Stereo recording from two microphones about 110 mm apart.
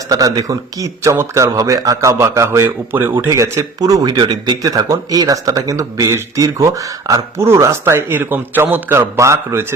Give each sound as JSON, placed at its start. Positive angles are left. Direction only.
{"t": 0.1, "sound": "speech", "side_deg": -35}